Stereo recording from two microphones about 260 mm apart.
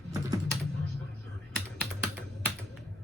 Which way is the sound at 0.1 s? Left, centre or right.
Centre.